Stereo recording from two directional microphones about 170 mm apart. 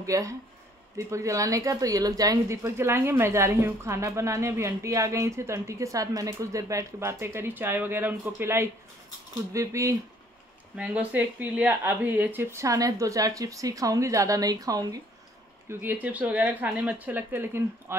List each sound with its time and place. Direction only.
0.0 s a woman's voice: 20° right (ahead or behind)